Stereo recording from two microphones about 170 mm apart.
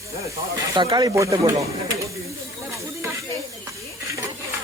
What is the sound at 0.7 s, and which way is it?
Speech, 25° right (ahead or behind).